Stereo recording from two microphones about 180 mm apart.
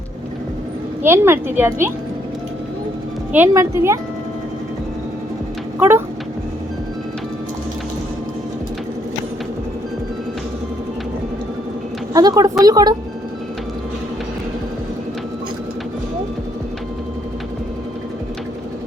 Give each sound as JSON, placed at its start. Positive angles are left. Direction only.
{"t": 1.0, "sound": "a woman's voice", "side_deg": -15}
{"t": 3.3, "sound": "a woman's voice", "side_deg": -15}
{"t": 12.1, "sound": "a woman's voice", "side_deg": -20}